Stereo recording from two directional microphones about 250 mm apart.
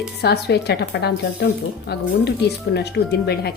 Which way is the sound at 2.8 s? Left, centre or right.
Left.